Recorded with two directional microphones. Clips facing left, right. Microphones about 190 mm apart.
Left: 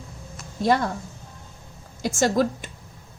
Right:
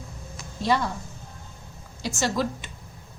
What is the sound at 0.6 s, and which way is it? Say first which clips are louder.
Speech: left 3 dB; 50° left (ahead or behind).